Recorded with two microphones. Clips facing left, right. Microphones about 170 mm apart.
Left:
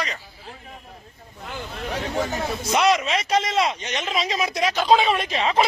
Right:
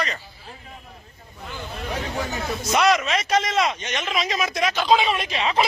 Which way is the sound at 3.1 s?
25° left (ahead or behind).